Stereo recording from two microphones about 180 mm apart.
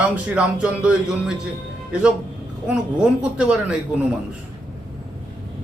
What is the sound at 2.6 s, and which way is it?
A man's voice, 5° right (ahead or behind).